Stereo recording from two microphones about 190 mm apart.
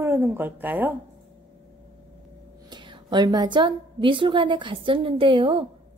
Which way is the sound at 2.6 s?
25° right (ahead or behind).